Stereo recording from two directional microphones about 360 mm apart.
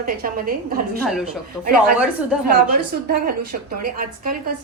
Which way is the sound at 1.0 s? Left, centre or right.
Centre.